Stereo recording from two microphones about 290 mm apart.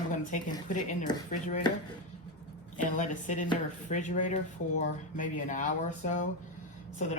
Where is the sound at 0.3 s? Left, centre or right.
Left.